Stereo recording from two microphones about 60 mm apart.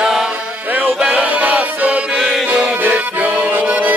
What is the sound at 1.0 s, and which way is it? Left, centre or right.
Music, centre.